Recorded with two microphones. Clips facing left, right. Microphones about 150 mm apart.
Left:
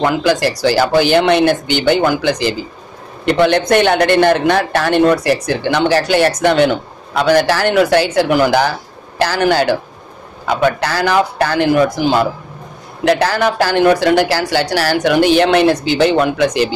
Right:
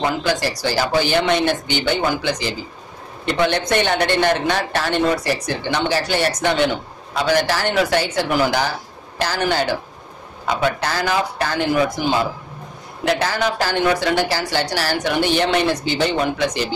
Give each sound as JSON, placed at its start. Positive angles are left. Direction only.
{"t": 0.0, "sound": "a woman's voice", "side_deg": 65}
{"t": 3.3, "sound": "speech", "side_deg": 70}
{"t": 3.7, "sound": "speech", "side_deg": 60}
{"t": 6.4, "sound": "speech", "side_deg": 50}
{"t": 9.2, "sound": "speech", "side_deg": 70}
{"t": 10.4, "sound": "speech", "side_deg": 60}
{"t": 12.0, "sound": "a woman's voice", "side_deg": 85}
{"t": 13.0, "sound": "a woman's voice", "side_deg": 65}